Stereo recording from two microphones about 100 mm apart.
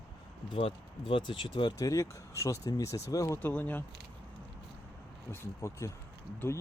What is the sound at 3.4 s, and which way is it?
Speech, 15° left (ahead or behind).